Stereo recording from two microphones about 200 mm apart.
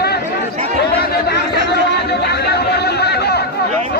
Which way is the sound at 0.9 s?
50° left (ahead or behind).